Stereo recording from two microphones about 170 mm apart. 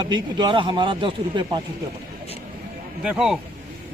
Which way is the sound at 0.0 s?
25° right (ahead or behind).